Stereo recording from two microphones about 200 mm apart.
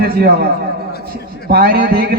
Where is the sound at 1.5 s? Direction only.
50° right (ahead or behind).